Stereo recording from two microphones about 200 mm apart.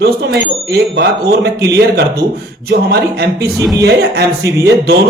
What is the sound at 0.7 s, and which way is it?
Speech, 55° right (ahead or behind).